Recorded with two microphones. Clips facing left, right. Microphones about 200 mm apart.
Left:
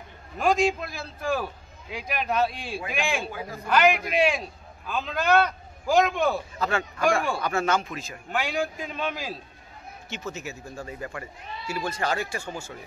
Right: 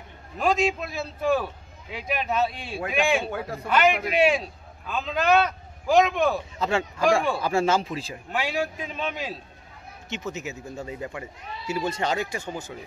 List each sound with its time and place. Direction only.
0.4 s a man's voice: centre (ahead or behind)
3.3 s a man's voice: 65° right (ahead or behind)
3.6 s a man's voice: centre (ahead or behind)
6.6 s speech: 25° right (ahead or behind)
8.3 s a man's voice: 5° right (ahead or behind)
10.0 s speech: 20° right (ahead or behind)